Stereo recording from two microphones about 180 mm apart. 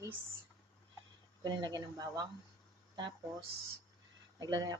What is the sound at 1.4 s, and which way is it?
Speech, 20° right (ahead or behind).